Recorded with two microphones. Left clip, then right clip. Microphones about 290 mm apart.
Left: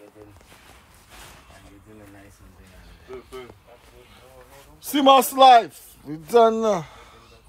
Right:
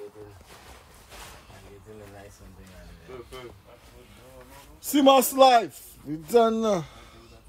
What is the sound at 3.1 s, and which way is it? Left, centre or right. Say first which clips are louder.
Speech: left 3 dB; centre.